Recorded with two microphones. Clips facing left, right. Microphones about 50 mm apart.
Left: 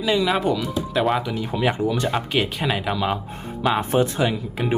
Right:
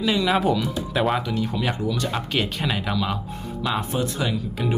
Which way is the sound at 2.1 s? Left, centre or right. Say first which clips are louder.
Left 3 dB; centre.